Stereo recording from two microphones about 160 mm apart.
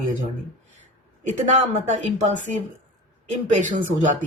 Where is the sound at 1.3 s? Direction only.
45° right (ahead or behind).